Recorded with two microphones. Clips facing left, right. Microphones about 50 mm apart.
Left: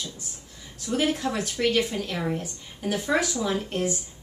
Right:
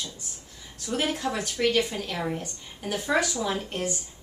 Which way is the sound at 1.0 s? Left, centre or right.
Centre.